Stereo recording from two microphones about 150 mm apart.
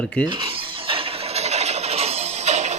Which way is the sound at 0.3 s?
35° right (ahead or behind).